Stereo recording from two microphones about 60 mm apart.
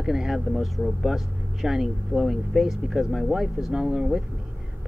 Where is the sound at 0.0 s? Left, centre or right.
Centre.